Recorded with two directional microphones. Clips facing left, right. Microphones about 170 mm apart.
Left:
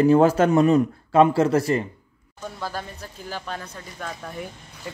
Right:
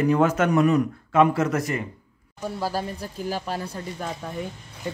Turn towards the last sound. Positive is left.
turn(degrees=-25)  # may be behind; listen again after turning